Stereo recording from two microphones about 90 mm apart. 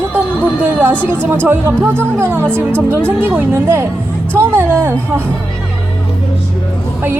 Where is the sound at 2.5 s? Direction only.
15° left (ahead or behind).